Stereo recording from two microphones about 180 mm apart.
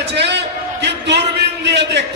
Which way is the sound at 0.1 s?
70° right (ahead or behind).